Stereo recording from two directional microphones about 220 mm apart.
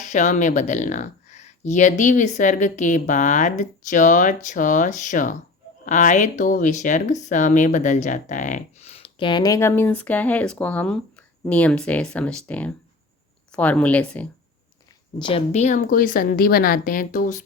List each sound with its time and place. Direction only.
0.0 s speech: 35° left (ahead or behind); by 14.3 s 5° left (ahead or behind)
15.2 s speech: 25° left (ahead or behind)